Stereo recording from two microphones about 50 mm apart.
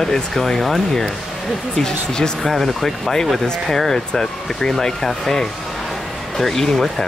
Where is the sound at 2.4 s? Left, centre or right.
Centre.